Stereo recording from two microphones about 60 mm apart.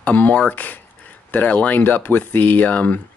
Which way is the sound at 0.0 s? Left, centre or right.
Left.